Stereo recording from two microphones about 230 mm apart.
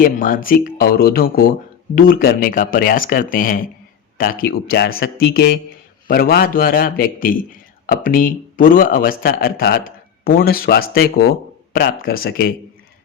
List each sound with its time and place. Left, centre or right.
0.0 s speech: left